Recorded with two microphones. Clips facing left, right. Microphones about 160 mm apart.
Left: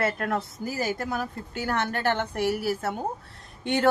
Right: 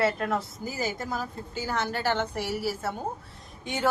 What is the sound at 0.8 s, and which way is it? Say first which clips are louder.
A woman's voice: left 2 dB; 60° left (ahead or behind).